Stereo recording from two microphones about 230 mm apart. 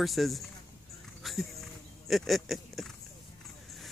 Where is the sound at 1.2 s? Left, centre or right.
Centre.